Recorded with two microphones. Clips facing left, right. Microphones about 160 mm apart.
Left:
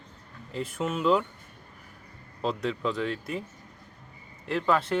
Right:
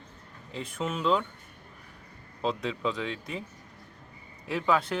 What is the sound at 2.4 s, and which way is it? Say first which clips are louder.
Speech: left 1 dB; centre (ahead or behind).